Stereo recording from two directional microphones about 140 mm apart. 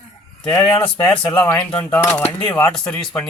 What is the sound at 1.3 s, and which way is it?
A man's voice, 10° left (ahead or behind).